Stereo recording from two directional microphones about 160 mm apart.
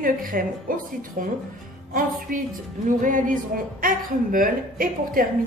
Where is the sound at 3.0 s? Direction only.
55° right (ahead or behind).